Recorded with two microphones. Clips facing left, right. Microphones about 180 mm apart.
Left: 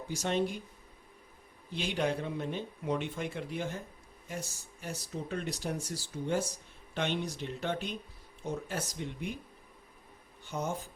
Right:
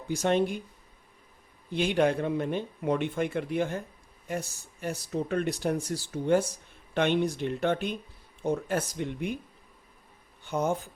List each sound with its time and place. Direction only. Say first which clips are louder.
0.1 s speech: right 6 dB; 60° right (ahead or behind)
1.7 s speech: right 7 dB; 55° right (ahead or behind)
10.4 s speech: right 7 dB; 60° right (ahead or behind)